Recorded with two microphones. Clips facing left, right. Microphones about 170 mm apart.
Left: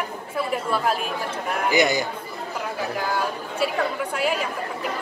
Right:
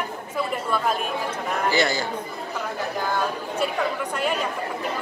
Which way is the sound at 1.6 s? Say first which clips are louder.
Left 3 dB; 15° left (ahead or behind).